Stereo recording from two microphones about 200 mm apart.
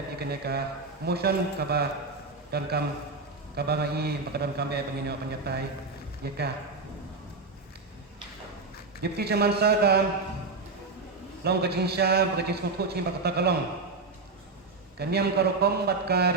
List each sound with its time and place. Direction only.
0.2 s a man's voice: 50° right (ahead or behind)
9.0 s a man's voice: 55° right (ahead or behind)
11.4 s a man's voice: 55° right (ahead or behind)
14.9 s a man's voice: 55° right (ahead or behind)